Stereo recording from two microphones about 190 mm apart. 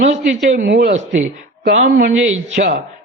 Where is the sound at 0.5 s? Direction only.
60° right (ahead or behind).